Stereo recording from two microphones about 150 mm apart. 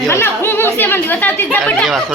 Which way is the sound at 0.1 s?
15° left (ahead or behind).